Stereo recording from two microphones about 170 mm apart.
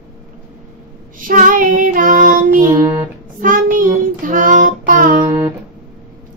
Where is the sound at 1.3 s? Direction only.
55° right (ahead or behind).